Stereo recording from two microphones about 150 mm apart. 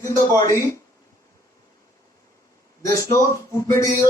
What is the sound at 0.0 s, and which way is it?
Speech, 20° left (ahead or behind).